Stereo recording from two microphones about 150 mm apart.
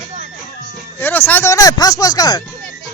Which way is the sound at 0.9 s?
15° left (ahead or behind).